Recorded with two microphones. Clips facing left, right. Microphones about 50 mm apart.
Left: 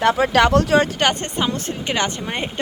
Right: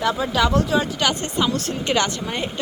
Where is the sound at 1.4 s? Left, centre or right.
Left.